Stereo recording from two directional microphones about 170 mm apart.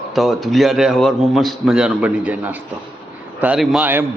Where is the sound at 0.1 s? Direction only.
Centre (ahead or behind).